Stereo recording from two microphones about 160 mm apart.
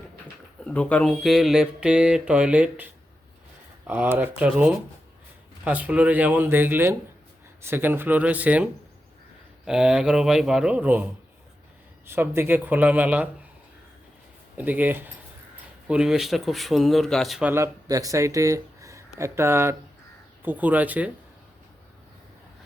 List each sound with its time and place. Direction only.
0.6 s speech: 10° left (ahead or behind); by 13.2 s 10° right (ahead or behind)
14.5 s speech: 10° right (ahead or behind)
17.5 s speech: 20° right (ahead or behind)